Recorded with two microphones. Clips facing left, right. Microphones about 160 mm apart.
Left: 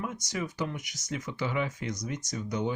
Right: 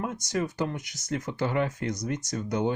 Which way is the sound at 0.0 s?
55° right (ahead or behind).